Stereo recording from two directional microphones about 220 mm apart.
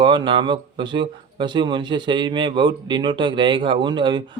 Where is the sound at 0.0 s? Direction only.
20° right (ahead or behind).